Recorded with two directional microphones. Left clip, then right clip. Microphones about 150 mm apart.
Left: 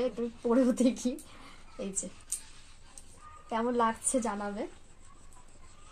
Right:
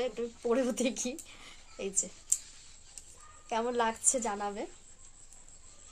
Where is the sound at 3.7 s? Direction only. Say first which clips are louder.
Left 3 dB; 20° right (ahead or behind).